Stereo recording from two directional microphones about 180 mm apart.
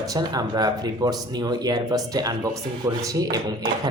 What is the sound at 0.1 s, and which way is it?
Speech, 20° right (ahead or behind).